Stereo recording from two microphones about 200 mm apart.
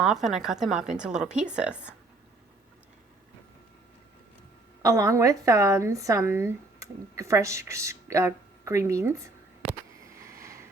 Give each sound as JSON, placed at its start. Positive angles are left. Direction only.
{"t": 0.0, "sound": "a woman's voice", "side_deg": 0}
{"t": 4.8, "sound": "a woman's voice", "side_deg": -15}
{"t": 10.2, "sound": "a sound", "side_deg": -15}